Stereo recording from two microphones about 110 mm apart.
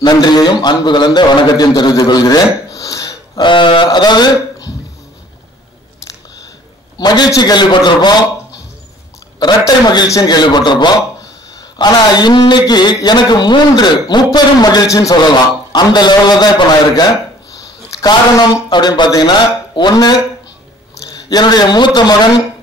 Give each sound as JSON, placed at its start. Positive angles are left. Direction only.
{"t": 0.0, "sound": "a man's voice", "side_deg": 40}
{"t": 7.0, "sound": "a man's voice", "side_deg": 40}
{"t": 9.4, "sound": "a man's voice", "side_deg": 40}